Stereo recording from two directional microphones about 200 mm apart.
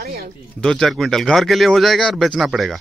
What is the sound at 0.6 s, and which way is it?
Speech, centre (ahead or behind).